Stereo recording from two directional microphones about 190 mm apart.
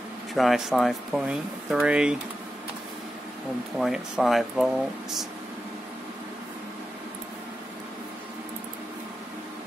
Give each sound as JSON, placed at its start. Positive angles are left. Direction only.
{"t": 0.3, "sound": "speech", "side_deg": 0}
{"t": 3.7, "sound": "speech", "side_deg": 0}